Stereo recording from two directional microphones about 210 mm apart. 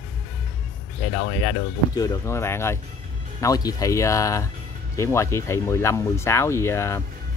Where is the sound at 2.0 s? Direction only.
15° left (ahead or behind).